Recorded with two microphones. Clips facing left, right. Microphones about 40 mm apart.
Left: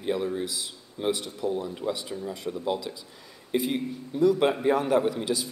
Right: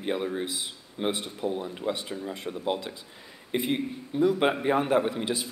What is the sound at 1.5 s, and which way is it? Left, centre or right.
Speech, centre.